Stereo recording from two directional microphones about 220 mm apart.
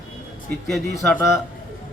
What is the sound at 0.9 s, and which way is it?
Speech, 10° left (ahead or behind).